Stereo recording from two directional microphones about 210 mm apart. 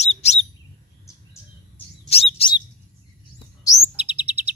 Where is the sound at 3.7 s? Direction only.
10° right (ahead or behind).